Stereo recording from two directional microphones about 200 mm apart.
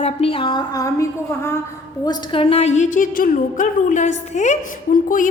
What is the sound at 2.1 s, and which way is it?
A woman's voice, 25° left (ahead or behind).